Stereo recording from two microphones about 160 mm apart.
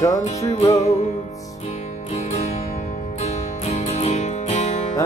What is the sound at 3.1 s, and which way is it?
Music, 40° left (ahead or behind).